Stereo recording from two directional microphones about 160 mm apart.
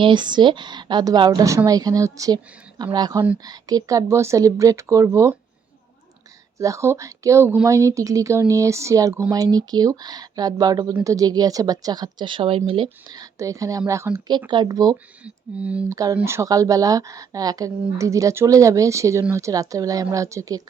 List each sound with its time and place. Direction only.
0.0 s a woman's voice: 30° right (ahead or behind)
6.6 s a woman's voice: 20° right (ahead or behind)
14.3 s a woman's voice: 30° right (ahead or behind)
15.2 s speech: 10° right (ahead or behind)
15.9 s a woman's voice: 20° right (ahead or behind)